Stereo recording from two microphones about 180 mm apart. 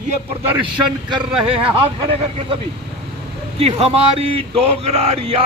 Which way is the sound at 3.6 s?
35° right (ahead or behind).